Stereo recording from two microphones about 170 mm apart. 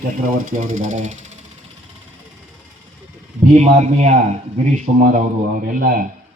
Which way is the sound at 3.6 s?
40° right (ahead or behind).